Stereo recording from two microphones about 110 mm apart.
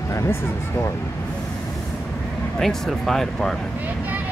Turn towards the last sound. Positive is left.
turn(degrees=5)  # may be behind; listen again after turning